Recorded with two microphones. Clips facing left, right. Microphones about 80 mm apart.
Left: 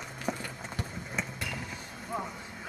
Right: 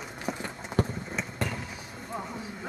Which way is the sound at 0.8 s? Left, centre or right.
Right.